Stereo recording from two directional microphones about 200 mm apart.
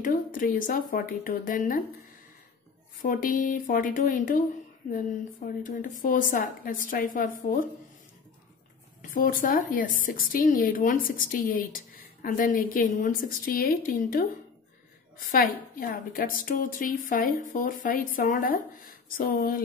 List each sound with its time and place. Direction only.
0.0 s speech: 45° left (ahead or behind)
3.0 s speech: 45° left (ahead or behind)
5.5 s speech: 45° left (ahead or behind)
9.1 s speech: 45° left (ahead or behind)
15.3 s speech: 45° left (ahead or behind)